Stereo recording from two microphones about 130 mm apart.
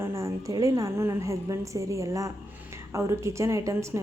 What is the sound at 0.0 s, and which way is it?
A woman's voice, 20° right (ahead or behind).